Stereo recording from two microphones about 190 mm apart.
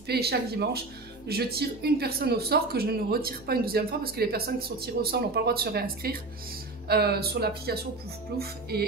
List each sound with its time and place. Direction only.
0.0 s speech: 55° right (ahead or behind)